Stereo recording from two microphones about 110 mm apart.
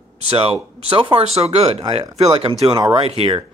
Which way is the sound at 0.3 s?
60° right (ahead or behind).